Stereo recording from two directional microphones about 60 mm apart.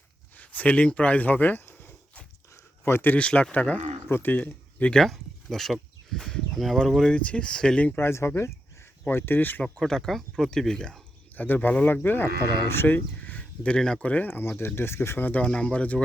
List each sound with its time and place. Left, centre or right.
0.3 s speech: left
2.5 s a sound: left
3.1 s speech: left
4.9 s speech: centre
7.1 s speech: centre
7.9 s speech: left
9.7 s speech: centre
11.3 s speech: left
13.2 s a sound: left
14.1 s speech: left
15.4 s speech: centre